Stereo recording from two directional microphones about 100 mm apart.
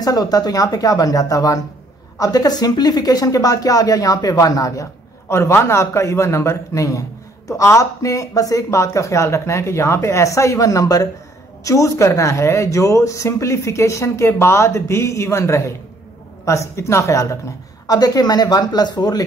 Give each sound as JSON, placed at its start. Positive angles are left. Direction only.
{"t": 0.0, "sound": "a man's voice", "side_deg": 40}